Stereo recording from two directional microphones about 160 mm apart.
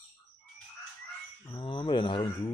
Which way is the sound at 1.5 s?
35° left (ahead or behind).